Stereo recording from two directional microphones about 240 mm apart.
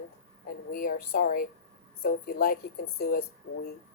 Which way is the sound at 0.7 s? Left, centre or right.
Left.